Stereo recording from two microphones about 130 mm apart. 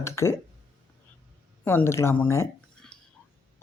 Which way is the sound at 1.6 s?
15° left (ahead or behind).